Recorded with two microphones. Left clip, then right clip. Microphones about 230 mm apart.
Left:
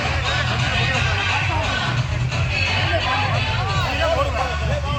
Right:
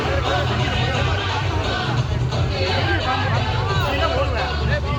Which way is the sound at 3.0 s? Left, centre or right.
Right.